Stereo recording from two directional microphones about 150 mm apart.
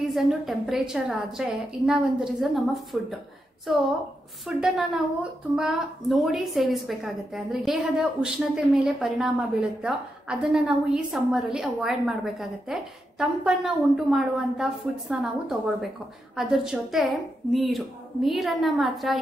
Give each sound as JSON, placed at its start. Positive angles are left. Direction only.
{"t": 0.1, "sound": "a woman's voice", "side_deg": 0}